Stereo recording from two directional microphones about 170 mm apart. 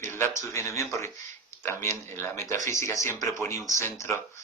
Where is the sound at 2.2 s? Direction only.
15° left (ahead or behind).